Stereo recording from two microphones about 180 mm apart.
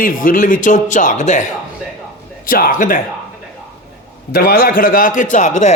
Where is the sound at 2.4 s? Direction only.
50° left (ahead or behind).